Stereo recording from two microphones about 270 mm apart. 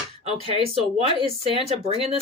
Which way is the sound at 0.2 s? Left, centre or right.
Right.